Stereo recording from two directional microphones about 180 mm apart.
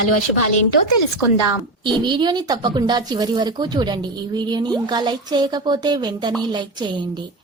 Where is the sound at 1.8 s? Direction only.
25° right (ahead or behind).